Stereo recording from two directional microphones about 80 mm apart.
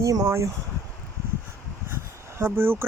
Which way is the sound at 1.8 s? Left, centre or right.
Right.